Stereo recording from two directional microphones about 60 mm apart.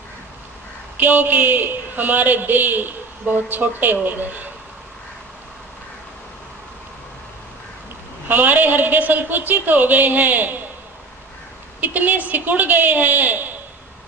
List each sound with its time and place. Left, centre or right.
0.9 s a woman's voice: right
8.3 s a woman's voice: right
11.8 s a woman's voice: right